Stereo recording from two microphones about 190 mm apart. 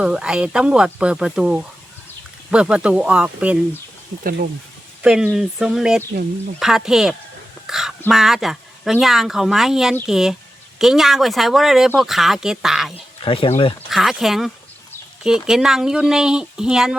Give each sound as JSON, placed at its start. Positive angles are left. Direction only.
{"t": 0.0, "sound": "speech", "side_deg": -5}
{"t": 4.2, "sound": "speech", "side_deg": -50}
{"t": 5.0, "sound": "speech", "side_deg": -5}
{"t": 7.7, "sound": "a sound", "side_deg": 0}
{"t": 8.0, "sound": "speech", "side_deg": 0}
{"t": 13.2, "sound": "speech", "side_deg": 30}
{"t": 13.9, "sound": "speech", "side_deg": 0}